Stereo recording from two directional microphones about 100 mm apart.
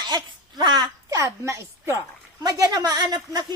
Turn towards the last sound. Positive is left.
turn(degrees=-45)  # may be behind; listen again after turning